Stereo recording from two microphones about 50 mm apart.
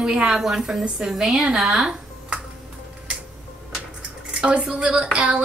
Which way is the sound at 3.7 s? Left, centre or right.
Centre.